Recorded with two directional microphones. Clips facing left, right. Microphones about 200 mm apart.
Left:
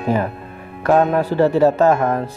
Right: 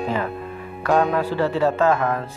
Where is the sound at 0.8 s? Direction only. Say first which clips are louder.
Left 4 dB; 45° left (ahead or behind).